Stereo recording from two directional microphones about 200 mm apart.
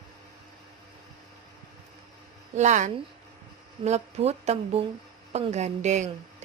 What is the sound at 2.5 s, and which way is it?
A woman's voice, 35° right (ahead or behind).